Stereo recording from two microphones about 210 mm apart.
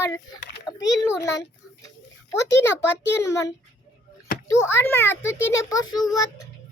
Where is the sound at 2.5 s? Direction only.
10° left (ahead or behind).